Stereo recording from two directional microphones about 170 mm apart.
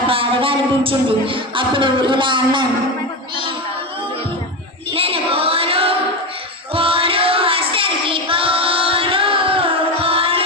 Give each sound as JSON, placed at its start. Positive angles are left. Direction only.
{"t": 0.1, "sound": "music", "side_deg": -30}
{"t": 4.9, "sound": "female singing", "side_deg": -35}
{"t": 6.7, "sound": "child singing", "side_deg": -30}